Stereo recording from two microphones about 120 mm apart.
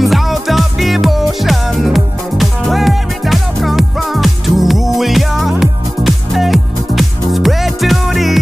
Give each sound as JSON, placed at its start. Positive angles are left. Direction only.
{"t": 0.0, "sound": "music", "side_deg": 0}